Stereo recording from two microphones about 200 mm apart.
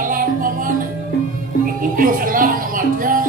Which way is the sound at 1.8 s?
45° right (ahead or behind).